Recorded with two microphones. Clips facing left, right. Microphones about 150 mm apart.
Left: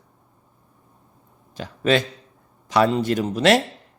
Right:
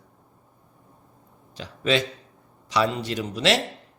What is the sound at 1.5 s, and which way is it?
Speech, 50° left (ahead or behind).